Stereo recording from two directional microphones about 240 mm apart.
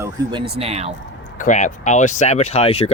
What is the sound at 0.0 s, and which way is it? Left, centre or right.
Speech, centre.